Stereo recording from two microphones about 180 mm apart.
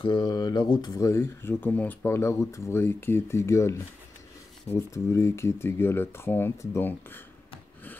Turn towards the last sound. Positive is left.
turn(degrees=10)  # may be behind; listen again after turning